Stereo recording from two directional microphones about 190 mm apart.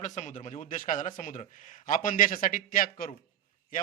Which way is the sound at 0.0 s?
40° left (ahead or behind).